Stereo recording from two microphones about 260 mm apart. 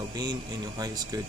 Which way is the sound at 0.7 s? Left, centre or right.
Centre.